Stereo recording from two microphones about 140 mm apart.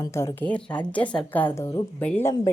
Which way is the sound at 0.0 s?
20° left (ahead or behind).